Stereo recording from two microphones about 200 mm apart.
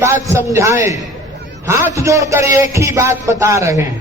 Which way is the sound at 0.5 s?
15° right (ahead or behind).